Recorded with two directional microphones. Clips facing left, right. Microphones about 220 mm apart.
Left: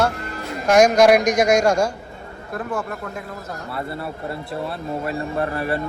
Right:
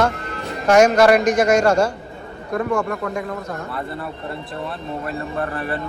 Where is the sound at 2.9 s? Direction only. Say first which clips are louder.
Right 6 dB; 90° right.